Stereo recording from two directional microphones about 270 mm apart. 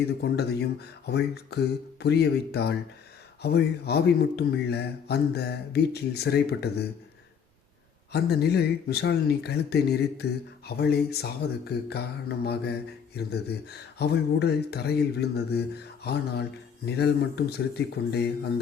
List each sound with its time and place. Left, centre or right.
0.2 s speech: left
8.1 s speech: left